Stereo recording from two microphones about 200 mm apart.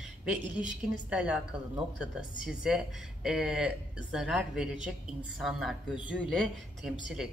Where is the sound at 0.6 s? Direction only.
5° right (ahead or behind).